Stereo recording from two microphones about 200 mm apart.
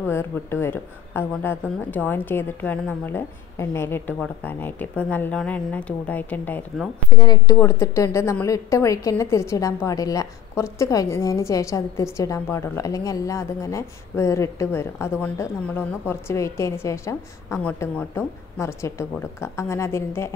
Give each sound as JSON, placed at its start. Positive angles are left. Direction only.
{"t": 0.0, "sound": "a woman's voice", "side_deg": 10}
{"t": 7.1, "sound": "a woman's voice", "side_deg": 20}